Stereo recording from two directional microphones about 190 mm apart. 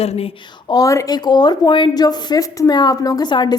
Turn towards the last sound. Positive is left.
turn(degrees=20)  # may be behind; listen again after turning